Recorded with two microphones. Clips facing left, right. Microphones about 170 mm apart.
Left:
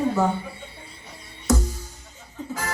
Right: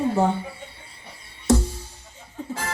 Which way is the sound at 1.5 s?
30° right (ahead or behind).